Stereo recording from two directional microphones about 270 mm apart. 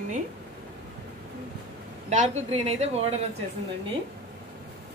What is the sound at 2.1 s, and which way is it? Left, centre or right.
Speech, right.